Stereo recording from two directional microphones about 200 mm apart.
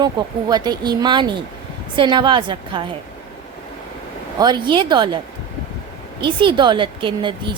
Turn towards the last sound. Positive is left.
turn(degrees=-25)  # may be behind; listen again after turning